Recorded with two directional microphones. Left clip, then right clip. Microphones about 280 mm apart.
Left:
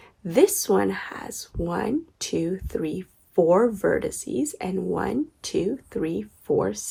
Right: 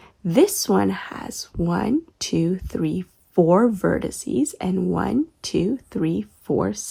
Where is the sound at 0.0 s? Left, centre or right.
Right.